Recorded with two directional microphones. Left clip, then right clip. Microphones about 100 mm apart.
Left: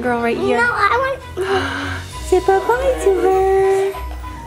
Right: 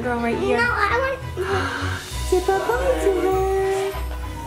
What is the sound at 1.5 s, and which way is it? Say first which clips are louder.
Speech: left 5 dB; 35° left (ahead or behind).